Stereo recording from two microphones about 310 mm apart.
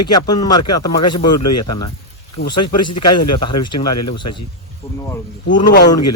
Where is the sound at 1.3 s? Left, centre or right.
Left.